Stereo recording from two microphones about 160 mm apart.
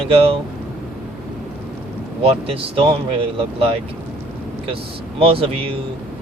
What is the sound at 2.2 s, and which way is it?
Speech, 35° right (ahead or behind).